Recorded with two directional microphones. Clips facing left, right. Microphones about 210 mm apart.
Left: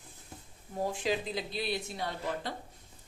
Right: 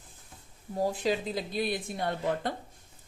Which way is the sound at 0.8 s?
40° right (ahead or behind).